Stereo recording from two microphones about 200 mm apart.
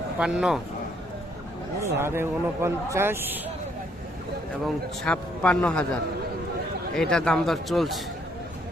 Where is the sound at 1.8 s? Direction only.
10° right (ahead or behind).